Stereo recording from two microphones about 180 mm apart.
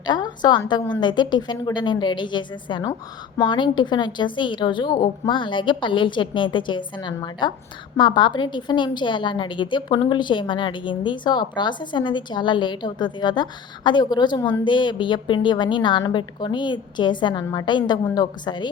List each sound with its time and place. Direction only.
0.0 s a woman's voice: 25° left (ahead or behind)